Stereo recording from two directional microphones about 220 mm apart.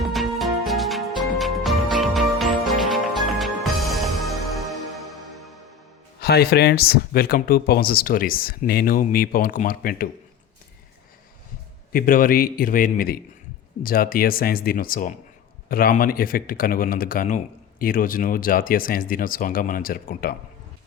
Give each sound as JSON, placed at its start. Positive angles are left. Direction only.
{"t": 0.0, "sound": "music", "side_deg": 0}
{"t": 6.1, "sound": "speech", "side_deg": 45}
{"t": 11.9, "sound": "speech", "side_deg": 40}